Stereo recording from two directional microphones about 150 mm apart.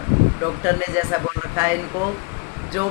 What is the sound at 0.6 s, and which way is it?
A man's voice, 15° right (ahead or behind).